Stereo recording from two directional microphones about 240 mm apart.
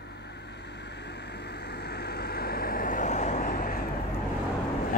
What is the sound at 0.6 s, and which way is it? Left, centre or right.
Vehicle, left.